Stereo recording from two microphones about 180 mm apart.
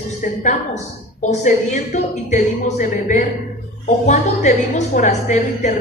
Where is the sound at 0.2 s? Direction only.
45° left (ahead or behind).